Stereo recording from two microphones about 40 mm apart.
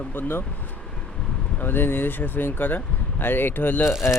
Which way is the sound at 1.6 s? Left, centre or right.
Left.